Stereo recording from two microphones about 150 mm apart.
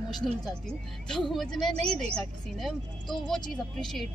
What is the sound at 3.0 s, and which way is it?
Speech, 30° left (ahead or behind).